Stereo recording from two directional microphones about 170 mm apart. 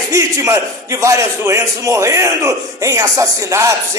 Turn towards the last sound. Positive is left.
turn(degrees=-15)  # may be behind; listen again after turning